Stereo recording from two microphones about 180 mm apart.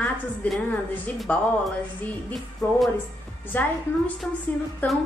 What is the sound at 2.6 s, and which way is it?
A woman's voice, 15° left (ahead or behind).